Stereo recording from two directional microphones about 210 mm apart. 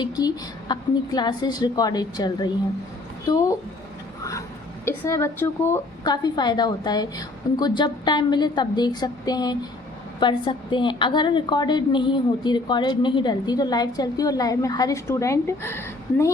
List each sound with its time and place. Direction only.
0.0 s a woman's voice: 20° left (ahead or behind)
4.2 s a sound: 15° left (ahead or behind)
4.9 s a woman's voice: 15° left (ahead or behind)